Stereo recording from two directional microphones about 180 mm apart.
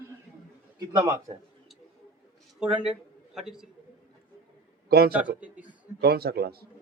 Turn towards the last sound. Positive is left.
turn(degrees=-60)  # may be behind; listen again after turning